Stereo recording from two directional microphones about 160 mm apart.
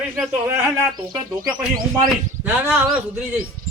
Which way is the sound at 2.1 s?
10° right (ahead or behind).